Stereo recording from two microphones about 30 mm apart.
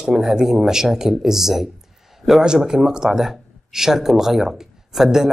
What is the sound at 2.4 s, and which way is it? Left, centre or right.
A man's voice, right.